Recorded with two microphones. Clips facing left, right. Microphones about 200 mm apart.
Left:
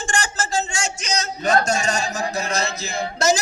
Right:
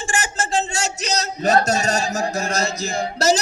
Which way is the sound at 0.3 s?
35° right (ahead or behind).